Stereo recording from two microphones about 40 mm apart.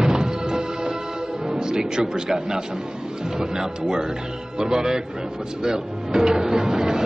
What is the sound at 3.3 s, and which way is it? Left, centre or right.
Speech, centre.